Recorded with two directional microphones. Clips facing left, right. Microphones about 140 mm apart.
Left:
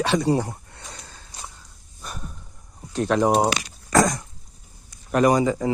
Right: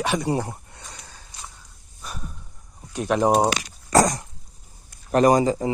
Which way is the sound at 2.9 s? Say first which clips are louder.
Left 1 dB; 15° right (ahead or behind).